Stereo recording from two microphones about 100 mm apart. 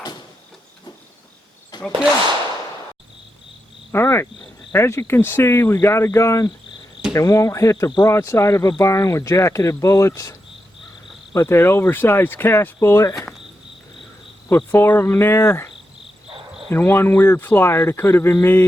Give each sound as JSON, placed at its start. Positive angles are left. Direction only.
{"t": 3.9, "sound": "insect", "side_deg": 25}
{"t": 4.7, "sound": "speech", "side_deg": 25}
{"t": 11.3, "sound": "speech", "side_deg": 25}
{"t": 14.5, "sound": "speech", "side_deg": 20}